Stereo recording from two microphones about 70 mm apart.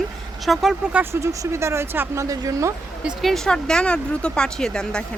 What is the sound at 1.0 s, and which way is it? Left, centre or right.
Speech, right.